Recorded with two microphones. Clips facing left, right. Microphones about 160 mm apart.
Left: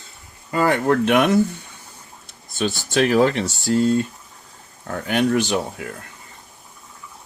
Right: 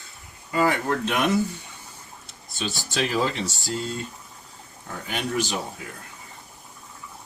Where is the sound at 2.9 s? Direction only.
55° left (ahead or behind).